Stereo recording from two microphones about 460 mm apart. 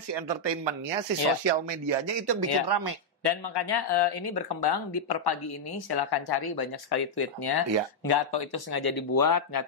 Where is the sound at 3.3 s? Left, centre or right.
Left.